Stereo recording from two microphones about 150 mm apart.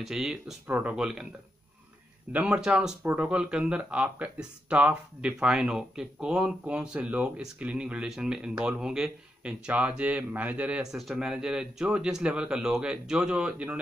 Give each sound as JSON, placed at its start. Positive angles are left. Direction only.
{"t": 0.0, "sound": "speech", "side_deg": -5}
{"t": 2.3, "sound": "speech", "side_deg": -5}